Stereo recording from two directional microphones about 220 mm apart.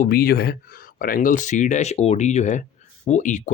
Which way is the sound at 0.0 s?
45° left (ahead or behind).